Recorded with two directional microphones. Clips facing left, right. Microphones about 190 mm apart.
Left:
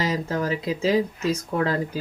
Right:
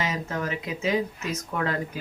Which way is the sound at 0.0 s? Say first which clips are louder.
Left 4 dB; 35° left (ahead or behind).